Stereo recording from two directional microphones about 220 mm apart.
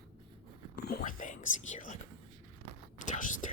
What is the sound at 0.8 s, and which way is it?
Whispering, 40° left (ahead or behind).